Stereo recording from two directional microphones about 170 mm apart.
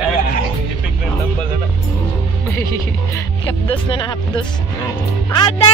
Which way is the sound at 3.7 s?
25° left (ahead or behind).